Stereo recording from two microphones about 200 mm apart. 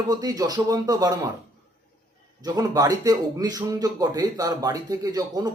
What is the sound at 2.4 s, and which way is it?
Speech, 20° right (ahead or behind).